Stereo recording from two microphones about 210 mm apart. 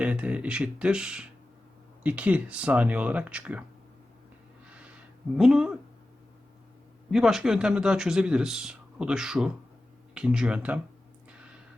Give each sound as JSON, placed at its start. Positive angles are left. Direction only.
{"t": 0.0, "sound": "speech", "side_deg": -5}
{"t": 5.4, "sound": "speech", "side_deg": 0}
{"t": 7.1, "sound": "speech", "side_deg": 0}